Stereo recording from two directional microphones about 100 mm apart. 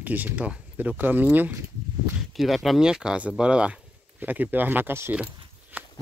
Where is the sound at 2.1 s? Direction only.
Centre (ahead or behind); by 5.1 s 25° right (ahead or behind).